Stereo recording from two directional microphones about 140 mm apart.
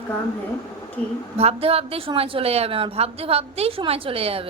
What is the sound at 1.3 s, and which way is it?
A woman's voice, 45° right (ahead or behind).